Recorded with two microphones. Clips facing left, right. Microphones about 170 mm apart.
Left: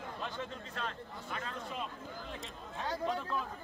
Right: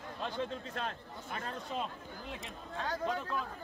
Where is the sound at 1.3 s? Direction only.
40° right (ahead or behind).